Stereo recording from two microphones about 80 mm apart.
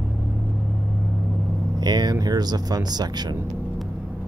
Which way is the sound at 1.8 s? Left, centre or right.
Right.